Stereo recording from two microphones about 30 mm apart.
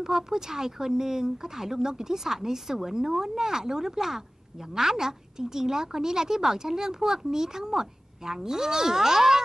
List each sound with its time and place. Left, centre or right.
0.0 s speech: centre